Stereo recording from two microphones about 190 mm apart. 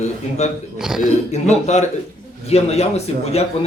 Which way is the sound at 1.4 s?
35° left (ahead or behind).